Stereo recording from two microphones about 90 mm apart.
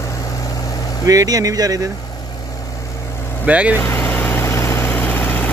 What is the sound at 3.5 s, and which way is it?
Speech, 15° right (ahead or behind).